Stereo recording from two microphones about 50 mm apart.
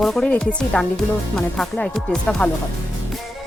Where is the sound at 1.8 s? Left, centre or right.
Left.